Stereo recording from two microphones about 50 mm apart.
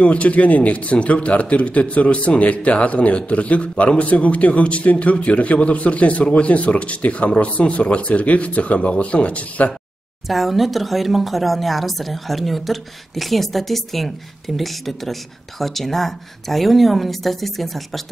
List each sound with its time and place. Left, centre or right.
0.0 s speech: left
10.2 s speech: centre